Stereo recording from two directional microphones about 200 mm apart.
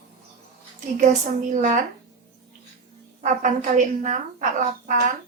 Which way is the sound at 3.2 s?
40° right (ahead or behind).